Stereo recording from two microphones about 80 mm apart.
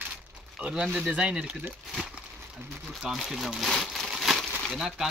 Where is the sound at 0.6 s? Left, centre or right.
Centre.